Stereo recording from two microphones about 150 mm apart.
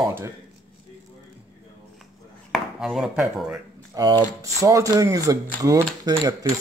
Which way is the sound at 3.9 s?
30° right (ahead or behind).